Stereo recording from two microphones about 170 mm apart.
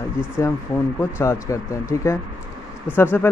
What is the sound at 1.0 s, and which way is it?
Speech, 15° left (ahead or behind).